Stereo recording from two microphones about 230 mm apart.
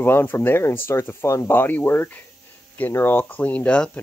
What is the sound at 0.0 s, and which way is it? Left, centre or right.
Speech, centre.